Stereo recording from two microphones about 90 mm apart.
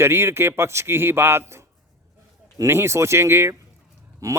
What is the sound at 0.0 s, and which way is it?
Speech, 25° right (ahead or behind).